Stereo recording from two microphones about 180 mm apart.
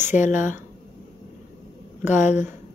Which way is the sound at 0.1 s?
45° left (ahead or behind).